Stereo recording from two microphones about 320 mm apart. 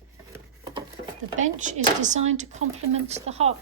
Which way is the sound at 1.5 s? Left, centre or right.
Right.